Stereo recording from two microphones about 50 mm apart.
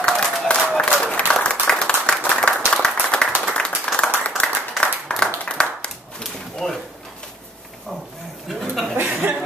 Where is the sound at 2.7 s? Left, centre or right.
Centre.